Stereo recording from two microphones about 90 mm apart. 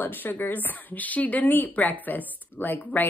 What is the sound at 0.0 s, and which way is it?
Speech, 20° left (ahead or behind).